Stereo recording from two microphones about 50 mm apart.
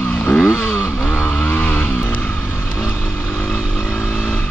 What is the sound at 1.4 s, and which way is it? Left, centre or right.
Vehicle, left.